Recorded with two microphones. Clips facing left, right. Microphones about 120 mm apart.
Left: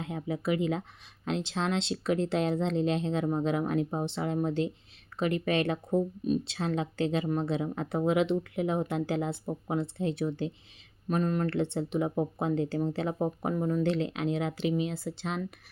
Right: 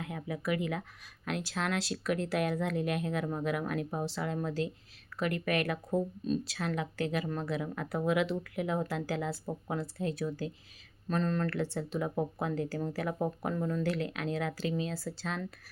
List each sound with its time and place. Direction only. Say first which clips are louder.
0.0 s speech: left 4 dB; 25° left (ahead or behind)